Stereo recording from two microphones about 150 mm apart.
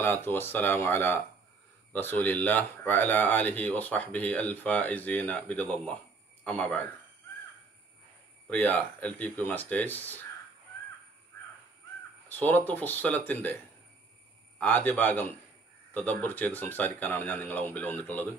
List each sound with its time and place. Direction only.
0.0 s speech: 15° left (ahead or behind)
8.5 s speech: 10° left (ahead or behind)
12.3 s speech: 10° left (ahead or behind)
14.6 s speech: 10° left (ahead or behind)